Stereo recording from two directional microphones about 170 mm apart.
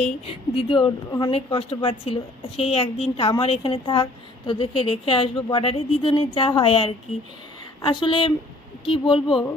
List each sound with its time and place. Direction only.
0.3 s a woman's voice: 30° left (ahead or behind)